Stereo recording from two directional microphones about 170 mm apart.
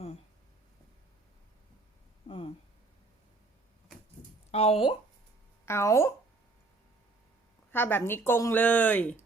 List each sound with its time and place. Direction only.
2.2 s a sound: 30° left (ahead or behind)
4.5 s speech: 35° left (ahead or behind)
5.6 s speech: 15° left (ahead or behind)
7.7 s speech: 10° left (ahead or behind)